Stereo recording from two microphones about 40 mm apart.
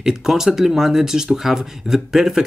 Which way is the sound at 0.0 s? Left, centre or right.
Centre.